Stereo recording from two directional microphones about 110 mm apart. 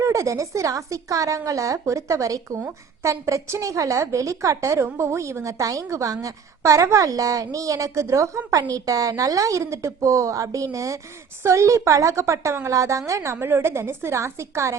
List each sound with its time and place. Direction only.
0.0 s a woman's voice: 30° right (ahead or behind)